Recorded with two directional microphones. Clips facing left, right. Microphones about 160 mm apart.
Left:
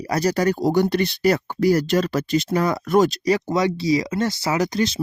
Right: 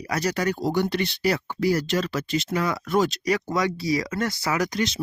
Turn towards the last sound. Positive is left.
turn(degrees=30)  # may be behind; listen again after turning